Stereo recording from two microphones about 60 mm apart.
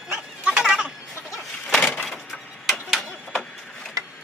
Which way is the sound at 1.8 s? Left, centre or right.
Left.